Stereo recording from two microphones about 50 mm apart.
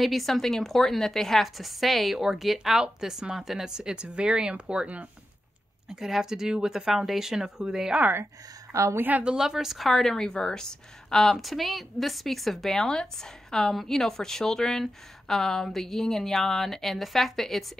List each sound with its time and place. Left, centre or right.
0.0 s a woman's voice: centre; by 5.0 s right
5.9 s speech: centre
9.2 s a woman's voice: centre